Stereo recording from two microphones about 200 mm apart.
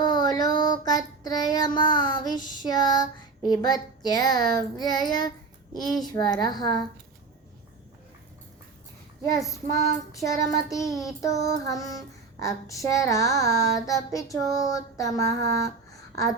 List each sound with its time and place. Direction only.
0.0 s child singing: 20° left (ahead or behind)
3.6 s a child's voice: 20° left (ahead or behind)
9.3 s child singing: 15° left (ahead or behind)